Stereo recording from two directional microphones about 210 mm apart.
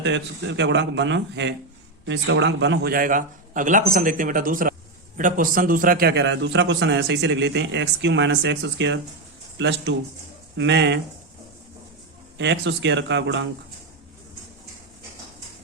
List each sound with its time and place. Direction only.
0.0 s a man's voice: 60° right (ahead or behind)
12.4 s a man's voice: 55° right (ahead or behind)